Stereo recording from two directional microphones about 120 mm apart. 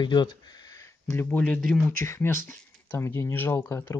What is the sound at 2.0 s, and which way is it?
Speech, 20° left (ahead or behind).